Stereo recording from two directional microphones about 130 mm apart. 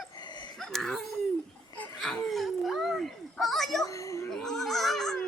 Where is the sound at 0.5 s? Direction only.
5° left (ahead or behind).